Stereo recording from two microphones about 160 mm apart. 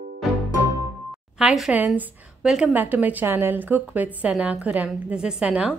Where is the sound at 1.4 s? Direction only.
5° right (ahead or behind).